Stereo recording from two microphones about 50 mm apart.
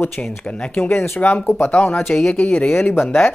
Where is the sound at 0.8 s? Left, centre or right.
Left.